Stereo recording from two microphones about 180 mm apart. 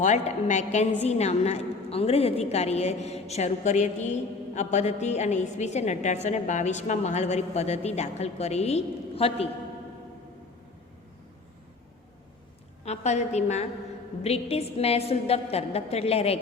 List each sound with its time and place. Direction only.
0.0 s a woman's voice: 40° left (ahead or behind)
12.8 s a woman's voice: 40° left (ahead or behind)